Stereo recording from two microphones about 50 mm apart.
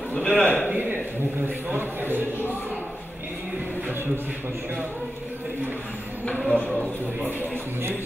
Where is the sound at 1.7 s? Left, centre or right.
Right.